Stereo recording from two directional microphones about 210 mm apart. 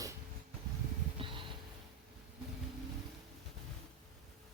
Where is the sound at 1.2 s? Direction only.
25° right (ahead or behind).